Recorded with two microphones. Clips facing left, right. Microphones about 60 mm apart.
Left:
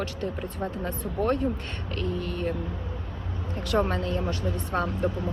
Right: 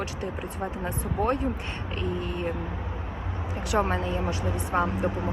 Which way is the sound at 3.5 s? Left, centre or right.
Centre.